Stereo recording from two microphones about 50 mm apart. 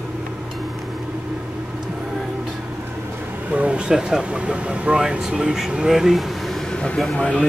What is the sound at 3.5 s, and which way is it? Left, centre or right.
Speech, right.